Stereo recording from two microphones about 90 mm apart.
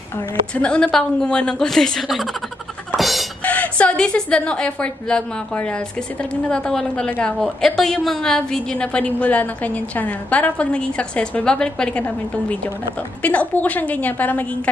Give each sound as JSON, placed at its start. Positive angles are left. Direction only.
{"t": 0.6, "sound": "a woman's voice", "side_deg": 10}
{"t": 3.0, "sound": "music", "side_deg": 0}
{"t": 3.4, "sound": "a woman's voice", "side_deg": 15}